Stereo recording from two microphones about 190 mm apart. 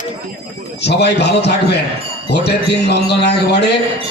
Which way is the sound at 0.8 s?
60° left (ahead or behind).